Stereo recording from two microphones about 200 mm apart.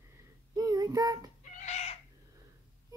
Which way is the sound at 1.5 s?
35° left (ahead or behind).